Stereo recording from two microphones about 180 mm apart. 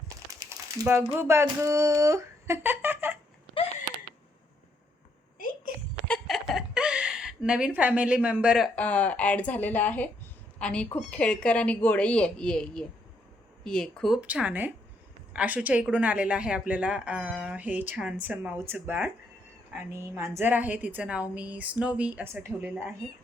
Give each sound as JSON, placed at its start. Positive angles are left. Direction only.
{"t": 0.8, "sound": "speech", "side_deg": -10}
{"t": 3.6, "sound": "a sound", "side_deg": 30}
{"t": 6.1, "sound": "a woman's voice", "side_deg": 0}